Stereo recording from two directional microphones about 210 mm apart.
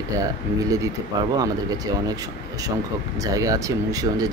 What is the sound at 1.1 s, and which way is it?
Speech, 20° right (ahead or behind).